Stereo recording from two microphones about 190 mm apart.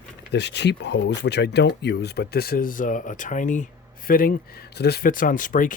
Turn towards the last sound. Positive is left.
turn(degrees=45)  # may be behind; listen again after turning